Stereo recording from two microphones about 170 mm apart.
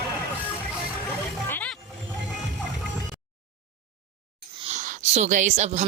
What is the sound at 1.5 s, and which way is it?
Wild animals, 10° left (ahead or behind).